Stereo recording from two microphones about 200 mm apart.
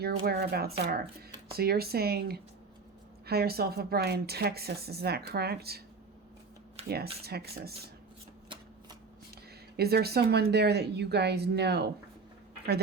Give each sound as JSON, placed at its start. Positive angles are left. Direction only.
{"t": 0.0, "sound": "a woman's voice", "side_deg": -50}
{"t": 6.8, "sound": "a woman's voice", "side_deg": -50}
{"t": 9.3, "sound": "speech", "side_deg": -50}